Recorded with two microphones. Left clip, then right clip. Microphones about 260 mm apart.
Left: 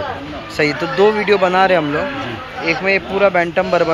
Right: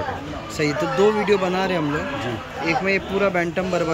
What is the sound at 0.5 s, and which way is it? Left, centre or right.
Speech, centre.